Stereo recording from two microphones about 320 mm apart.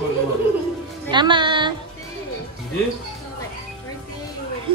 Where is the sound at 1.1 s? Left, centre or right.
Centre.